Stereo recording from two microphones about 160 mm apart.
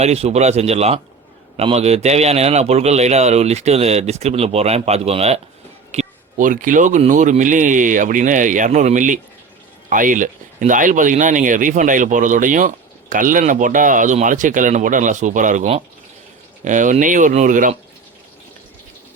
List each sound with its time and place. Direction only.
0.0 s a man's voice: 40° right (ahead or behind)
5.9 s speech: 50° right (ahead or behind)